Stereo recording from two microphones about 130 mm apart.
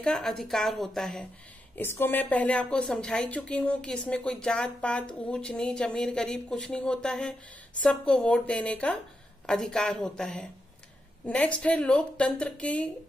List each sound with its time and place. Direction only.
0.0 s a woman's voice: 5° left (ahead or behind)
1.8 s a woman's voice: 15° left (ahead or behind)